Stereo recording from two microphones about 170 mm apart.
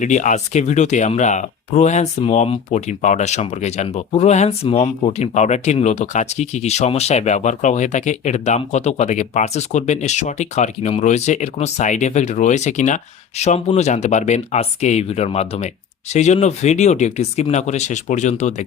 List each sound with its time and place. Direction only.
0.0 s speech: 45° left (ahead or behind)